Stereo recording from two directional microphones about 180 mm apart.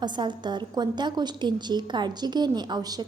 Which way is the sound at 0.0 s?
25° right (ahead or behind).